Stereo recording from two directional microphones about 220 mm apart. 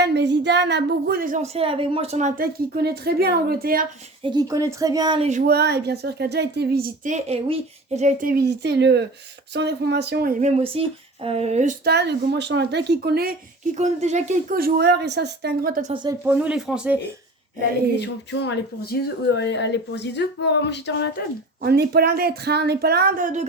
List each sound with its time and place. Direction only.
0.0 s speech: 50° right (ahead or behind)
4.2 s speech: 20° right (ahead or behind)
5.5 s speech: 45° right (ahead or behind)
10.4 s speech: 25° right (ahead or behind)
11.9 s speech: 50° right (ahead or behind)
13.7 s speech: 30° right (ahead or behind)
16.2 s speech: 5° right (ahead or behind)
18.0 s speech: 50° left (ahead or behind)
21.6 s speech: 45° right (ahead or behind)